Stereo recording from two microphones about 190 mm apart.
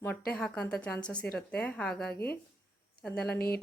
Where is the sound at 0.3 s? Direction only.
5° left (ahead or behind).